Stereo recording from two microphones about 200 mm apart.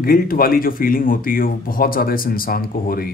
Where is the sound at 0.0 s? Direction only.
45° left (ahead or behind).